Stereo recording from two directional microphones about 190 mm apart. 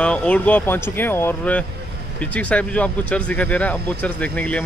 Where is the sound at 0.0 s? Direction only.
5° left (ahead or behind).